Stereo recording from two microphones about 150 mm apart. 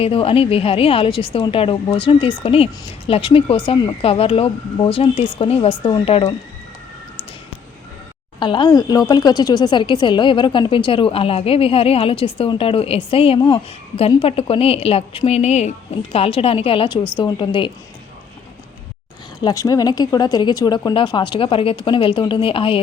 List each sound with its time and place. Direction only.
0.0 s speech: 40° left (ahead or behind)
8.4 s speech: 35° left (ahead or behind)
19.4 s speech: 25° left (ahead or behind)